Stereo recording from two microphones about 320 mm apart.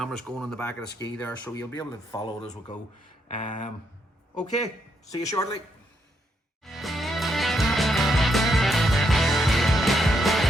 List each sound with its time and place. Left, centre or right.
0.0 s speech: centre
3.2 s a sound: left
5.1 s a woman's voice: centre
6.7 s music: centre